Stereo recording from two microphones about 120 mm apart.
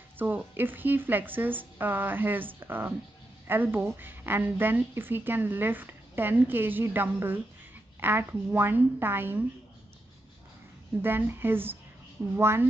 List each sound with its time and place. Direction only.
0.2 s a woman's voice: 15° right (ahead or behind)
11.0 s a woman's voice: 15° right (ahead or behind)